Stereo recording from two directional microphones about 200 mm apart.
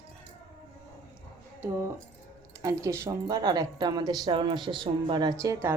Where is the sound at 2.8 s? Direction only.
15° right (ahead or behind).